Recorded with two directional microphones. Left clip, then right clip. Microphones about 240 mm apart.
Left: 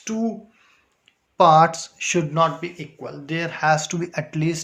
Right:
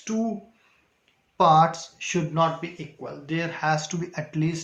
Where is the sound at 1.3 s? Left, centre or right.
Left.